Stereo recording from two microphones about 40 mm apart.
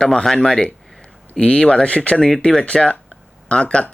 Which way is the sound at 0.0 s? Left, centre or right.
Centre.